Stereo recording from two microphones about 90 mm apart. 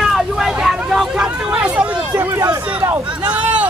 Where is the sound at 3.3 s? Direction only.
15° right (ahead or behind).